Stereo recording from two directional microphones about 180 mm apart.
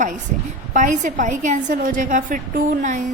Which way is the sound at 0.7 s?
45° right (ahead or behind).